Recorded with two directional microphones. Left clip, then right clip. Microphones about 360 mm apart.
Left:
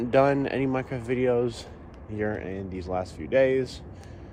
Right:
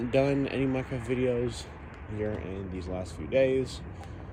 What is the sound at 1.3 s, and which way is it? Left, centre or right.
Speech, left.